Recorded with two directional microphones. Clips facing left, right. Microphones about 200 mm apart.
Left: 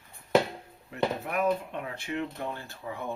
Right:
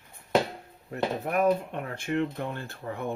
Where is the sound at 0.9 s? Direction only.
45° right (ahead or behind).